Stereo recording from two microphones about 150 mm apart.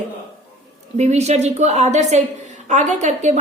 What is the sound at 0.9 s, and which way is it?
A woman's voice, 50° right (ahead or behind).